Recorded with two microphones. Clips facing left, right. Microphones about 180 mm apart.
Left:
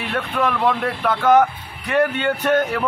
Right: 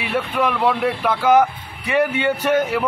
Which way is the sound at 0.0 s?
5° right (ahead or behind).